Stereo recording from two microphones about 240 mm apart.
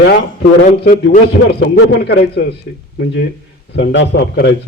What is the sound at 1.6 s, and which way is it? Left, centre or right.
A man's voice, left.